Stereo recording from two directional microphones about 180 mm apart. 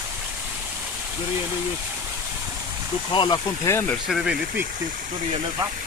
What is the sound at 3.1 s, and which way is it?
Speech, 20° left (ahead or behind).